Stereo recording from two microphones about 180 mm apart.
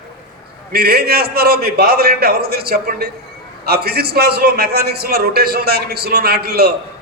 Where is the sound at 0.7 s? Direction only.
60° right (ahead or behind).